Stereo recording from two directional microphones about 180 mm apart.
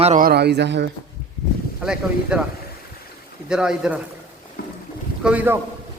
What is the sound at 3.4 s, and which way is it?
Speech, 5° right (ahead or behind).